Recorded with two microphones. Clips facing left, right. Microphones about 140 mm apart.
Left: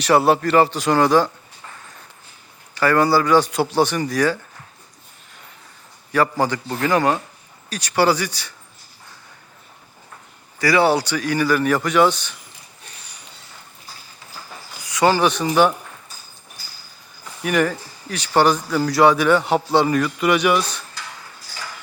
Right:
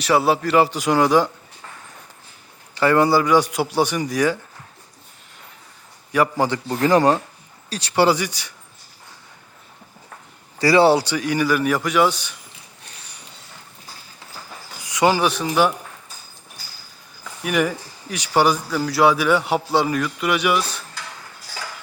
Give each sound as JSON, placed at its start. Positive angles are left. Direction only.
{"t": 0.0, "sound": "a man's voice", "side_deg": 0}
{"t": 2.7, "sound": "a man's voice", "side_deg": -20}
{"t": 6.4, "sound": "speech", "side_deg": -20}
{"t": 6.7, "sound": "speech", "side_deg": -30}
{"t": 10.6, "sound": "a man's voice", "side_deg": -30}
{"t": 14.8, "sound": "speech", "side_deg": -15}
{"t": 17.4, "sound": "speech", "side_deg": -5}